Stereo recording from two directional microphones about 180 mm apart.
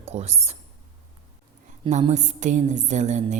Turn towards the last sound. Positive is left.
turn(degrees=-40)  # may be behind; listen again after turning